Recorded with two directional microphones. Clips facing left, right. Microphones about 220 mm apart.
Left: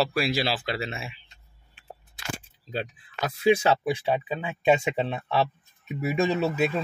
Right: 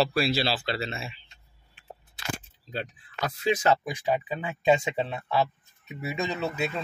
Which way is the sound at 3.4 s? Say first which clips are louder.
Left 6 dB; 10° left (ahead or behind).